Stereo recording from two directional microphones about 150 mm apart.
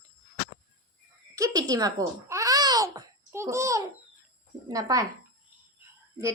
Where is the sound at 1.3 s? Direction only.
25° right (ahead or behind).